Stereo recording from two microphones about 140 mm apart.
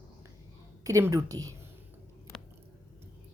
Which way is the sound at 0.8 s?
20° right (ahead or behind).